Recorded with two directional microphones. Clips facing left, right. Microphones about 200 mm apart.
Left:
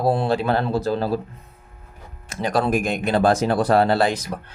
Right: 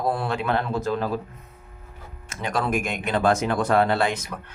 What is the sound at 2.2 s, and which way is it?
Speech, 35° left (ahead or behind).